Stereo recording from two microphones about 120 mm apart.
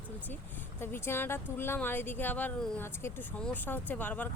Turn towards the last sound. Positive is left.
turn(degrees=15)  # may be behind; listen again after turning